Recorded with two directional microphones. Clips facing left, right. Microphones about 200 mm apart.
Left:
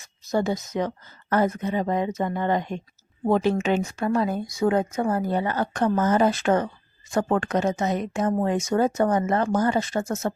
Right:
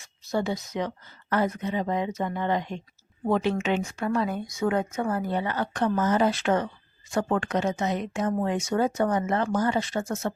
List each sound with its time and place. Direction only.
0.0 s speech: 45° left (ahead or behind)